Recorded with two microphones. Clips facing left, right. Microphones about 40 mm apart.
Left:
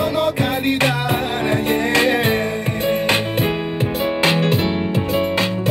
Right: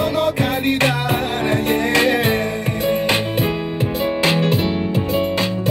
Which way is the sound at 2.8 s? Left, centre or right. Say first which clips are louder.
Even; left.